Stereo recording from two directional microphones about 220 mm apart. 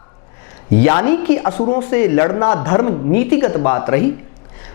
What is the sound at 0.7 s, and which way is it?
Speech, 15° left (ahead or behind).